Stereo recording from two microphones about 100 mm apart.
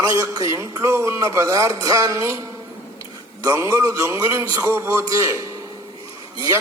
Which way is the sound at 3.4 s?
30° right (ahead or behind).